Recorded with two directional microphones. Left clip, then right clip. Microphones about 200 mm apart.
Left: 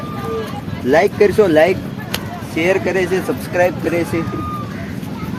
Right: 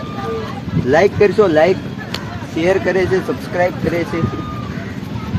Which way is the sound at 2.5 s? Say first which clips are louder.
Right 1 dB; 5° right (ahead or behind).